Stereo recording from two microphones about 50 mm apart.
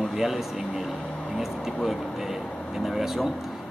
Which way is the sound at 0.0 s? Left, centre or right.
Centre.